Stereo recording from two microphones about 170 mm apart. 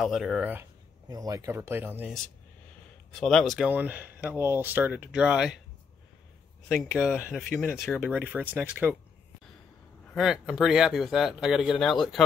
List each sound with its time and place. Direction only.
0.0 s speech: centre (ahead or behind)
1.0 s speech: 20° right (ahead or behind)
3.1 s speech: 5° left (ahead or behind)
6.7 s speech: centre (ahead or behind)
10.1 s speech: 5° right (ahead or behind)